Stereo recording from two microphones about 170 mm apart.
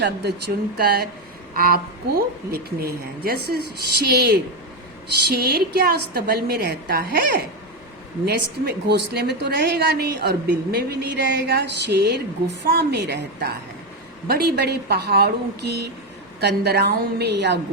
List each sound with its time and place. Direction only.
0.0 s a woman's voice: 75° right (ahead or behind)